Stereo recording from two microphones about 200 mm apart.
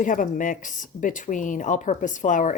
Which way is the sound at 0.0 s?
40° left (ahead or behind).